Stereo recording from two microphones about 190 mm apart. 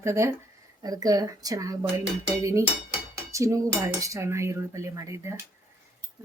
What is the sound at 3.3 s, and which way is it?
Dishes, 15° right (ahead or behind).